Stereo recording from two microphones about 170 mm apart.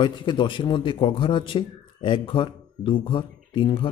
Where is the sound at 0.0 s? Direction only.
30° left (ahead or behind).